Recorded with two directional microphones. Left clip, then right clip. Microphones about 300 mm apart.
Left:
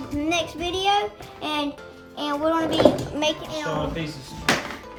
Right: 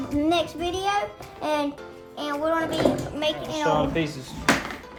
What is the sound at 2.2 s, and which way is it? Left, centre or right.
A child's voice, centre.